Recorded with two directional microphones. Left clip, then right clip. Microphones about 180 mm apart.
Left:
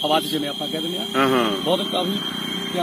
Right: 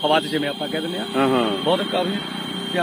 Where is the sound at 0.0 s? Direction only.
10° right (ahead or behind).